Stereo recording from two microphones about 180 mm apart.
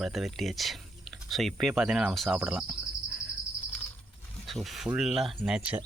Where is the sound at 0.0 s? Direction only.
Centre (ahead or behind).